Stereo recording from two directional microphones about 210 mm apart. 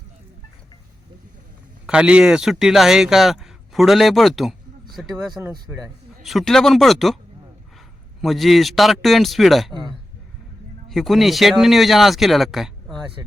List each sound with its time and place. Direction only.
1.9 s speech: 5° right (ahead or behind)
8.2 s speech: centre (ahead or behind)
10.8 s speech: centre (ahead or behind)
12.9 s a sound: 25° right (ahead or behind)